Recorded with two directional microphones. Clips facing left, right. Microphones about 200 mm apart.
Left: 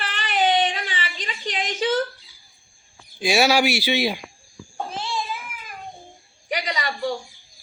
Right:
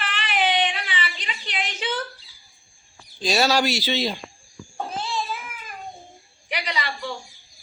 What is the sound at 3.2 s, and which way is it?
Speech, 10° left (ahead or behind).